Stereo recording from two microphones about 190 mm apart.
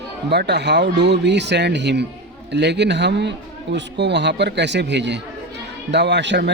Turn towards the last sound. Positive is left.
turn(degrees=-65)  # may be behind; listen again after turning